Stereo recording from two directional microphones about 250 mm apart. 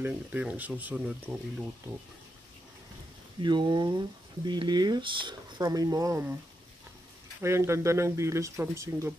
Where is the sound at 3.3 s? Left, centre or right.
Centre.